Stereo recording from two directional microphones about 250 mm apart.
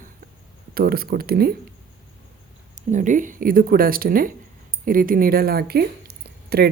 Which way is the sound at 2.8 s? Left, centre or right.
Right.